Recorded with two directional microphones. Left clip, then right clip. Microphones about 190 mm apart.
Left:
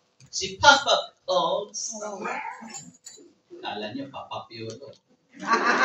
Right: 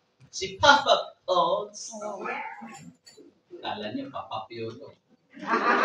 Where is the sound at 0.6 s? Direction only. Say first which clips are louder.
Left 1 dB; 25° right (ahead or behind).